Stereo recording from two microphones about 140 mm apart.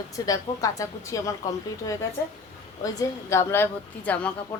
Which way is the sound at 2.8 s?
20° left (ahead or behind).